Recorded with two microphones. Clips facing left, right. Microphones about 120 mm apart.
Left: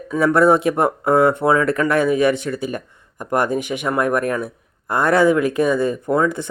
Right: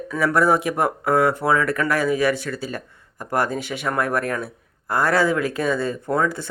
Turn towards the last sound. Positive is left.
turn(degrees=20)  # may be behind; listen again after turning